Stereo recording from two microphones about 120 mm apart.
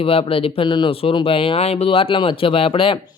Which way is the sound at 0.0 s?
50° left (ahead or behind).